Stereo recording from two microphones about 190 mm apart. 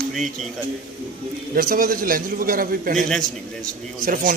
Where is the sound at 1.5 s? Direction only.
50° right (ahead or behind).